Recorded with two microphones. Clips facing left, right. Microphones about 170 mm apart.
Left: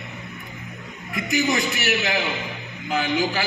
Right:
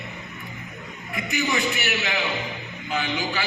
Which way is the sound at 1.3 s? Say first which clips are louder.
Left 3 dB; 40° left (ahead or behind).